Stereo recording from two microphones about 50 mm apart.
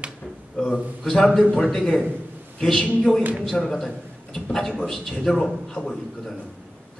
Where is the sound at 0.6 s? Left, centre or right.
Centre.